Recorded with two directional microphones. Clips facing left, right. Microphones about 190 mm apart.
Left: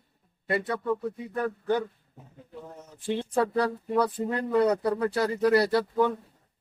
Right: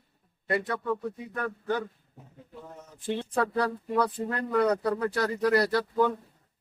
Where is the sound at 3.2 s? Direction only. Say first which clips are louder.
Left 3 dB; 15° left (ahead or behind).